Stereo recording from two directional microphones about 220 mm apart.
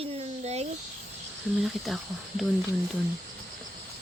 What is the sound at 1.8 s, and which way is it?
Speech, centre (ahead or behind).